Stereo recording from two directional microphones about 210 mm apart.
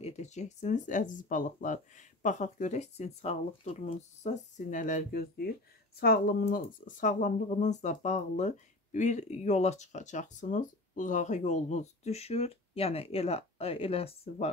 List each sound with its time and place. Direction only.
0.0 s speech: 30° left (ahead or behind)